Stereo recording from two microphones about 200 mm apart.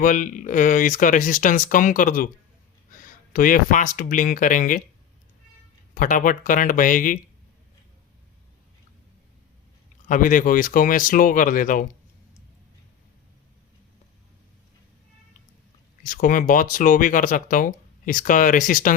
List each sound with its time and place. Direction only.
0.0 s speech: 40° left (ahead or behind)
5.9 s speech: 40° left (ahead or behind)
10.1 s speech: 40° left (ahead or behind)
16.0 s speech: 40° left (ahead or behind)